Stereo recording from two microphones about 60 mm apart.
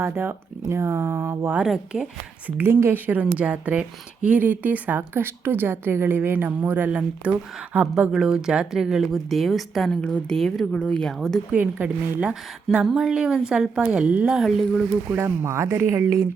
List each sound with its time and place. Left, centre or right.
0.0 s speech: right
1.6 s a woman's voice: centre
2.6 s a woman's voice: right
3.2 s a woman's voice: right
8.1 s a woman's voice: centre
10.0 s speech: centre
11.5 s a woman's voice: right
12.8 s a woman's voice: centre
14.3 s a woman's voice: centre
15.2 s speech: right